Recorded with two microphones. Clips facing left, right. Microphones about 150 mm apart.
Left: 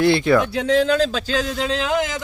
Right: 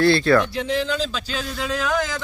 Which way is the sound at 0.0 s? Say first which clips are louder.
Left 1 dB; 15° left (ahead or behind).